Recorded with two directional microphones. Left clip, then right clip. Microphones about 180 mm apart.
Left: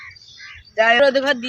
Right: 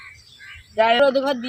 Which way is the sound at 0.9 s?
Centre (ahead or behind).